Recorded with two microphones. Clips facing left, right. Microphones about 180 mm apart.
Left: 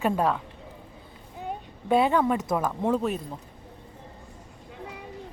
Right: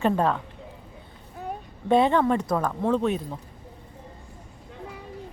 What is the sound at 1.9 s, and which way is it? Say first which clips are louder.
A woman's voice: right 2 dB; 5° left (ahead or behind).